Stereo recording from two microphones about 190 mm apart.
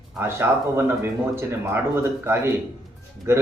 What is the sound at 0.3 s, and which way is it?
A man's voice, 15° right (ahead or behind).